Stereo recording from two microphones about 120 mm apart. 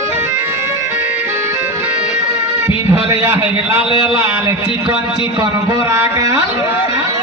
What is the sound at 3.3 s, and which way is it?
Speech, 20° right (ahead or behind).